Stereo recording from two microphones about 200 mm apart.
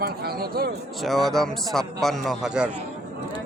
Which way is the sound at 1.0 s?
Centre (ahead or behind).